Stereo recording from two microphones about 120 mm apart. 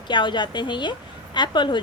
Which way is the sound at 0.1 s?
40° left (ahead or behind).